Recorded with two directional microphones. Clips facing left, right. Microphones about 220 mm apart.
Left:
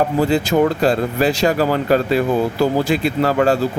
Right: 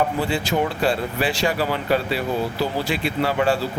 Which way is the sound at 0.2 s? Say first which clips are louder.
Left 7 dB; 40° left (ahead or behind).